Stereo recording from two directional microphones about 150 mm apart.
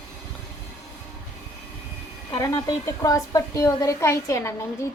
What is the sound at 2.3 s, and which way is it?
A woman's voice, 20° left (ahead or behind).